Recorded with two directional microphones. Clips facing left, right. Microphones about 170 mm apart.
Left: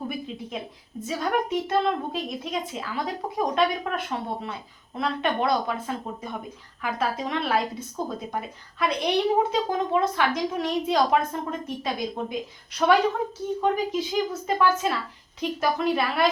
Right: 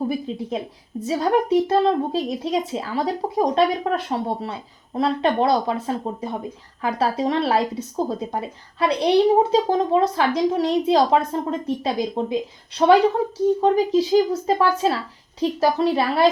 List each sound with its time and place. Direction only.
0.3 s speech: 35° right (ahead or behind)